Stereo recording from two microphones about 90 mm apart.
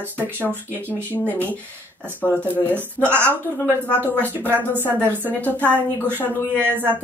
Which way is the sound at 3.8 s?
20° left (ahead or behind).